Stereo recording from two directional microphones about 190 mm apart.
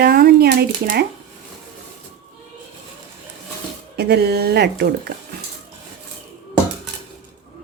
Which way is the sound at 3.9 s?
60° right (ahead or behind).